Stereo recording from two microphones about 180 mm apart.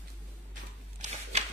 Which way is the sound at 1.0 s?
35° right (ahead or behind).